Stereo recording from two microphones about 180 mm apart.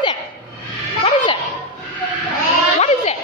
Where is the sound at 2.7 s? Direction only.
35° left (ahead or behind).